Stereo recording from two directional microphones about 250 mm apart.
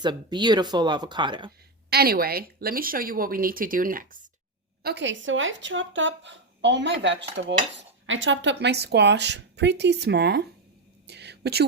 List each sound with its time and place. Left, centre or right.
0.0 s speech: centre
1.9 s a woman's voice: right
11.0 s whispering: right